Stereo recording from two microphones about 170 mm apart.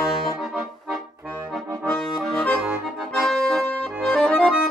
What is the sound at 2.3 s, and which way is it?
Accordion, 5° left (ahead or behind).